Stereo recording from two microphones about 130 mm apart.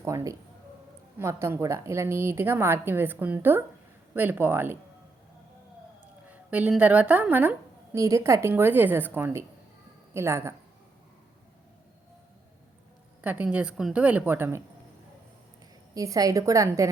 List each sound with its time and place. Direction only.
0.0 s a woman's voice: 25° right (ahead or behind)
6.2 s a woman's voice: 10° right (ahead or behind)
13.2 s a woman's voice: 10° right (ahead or behind)
16.0 s a woman's voice: 25° right (ahead or behind)